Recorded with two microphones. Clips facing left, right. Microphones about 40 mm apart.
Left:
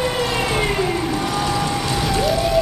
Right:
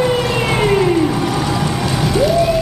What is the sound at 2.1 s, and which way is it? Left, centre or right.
Vehicle, centre.